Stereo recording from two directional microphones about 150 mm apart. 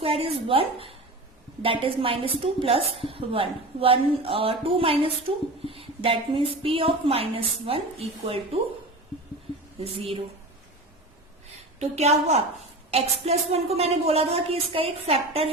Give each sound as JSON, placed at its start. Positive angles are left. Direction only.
{"t": 0.0, "sound": "a sound", "side_deg": -40}
{"t": 1.6, "sound": "a woman's voice", "side_deg": -35}
{"t": 9.8, "sound": "a woman's voice", "side_deg": -40}
{"t": 11.8, "sound": "speech", "side_deg": -45}